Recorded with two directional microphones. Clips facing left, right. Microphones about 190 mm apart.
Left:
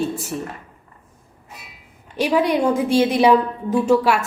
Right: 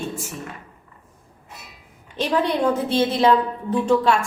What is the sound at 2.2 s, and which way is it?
A woman's voice, 10° left (ahead or behind).